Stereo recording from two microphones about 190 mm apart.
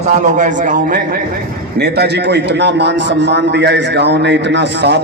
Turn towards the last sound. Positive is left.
turn(degrees=-65)  # may be behind; listen again after turning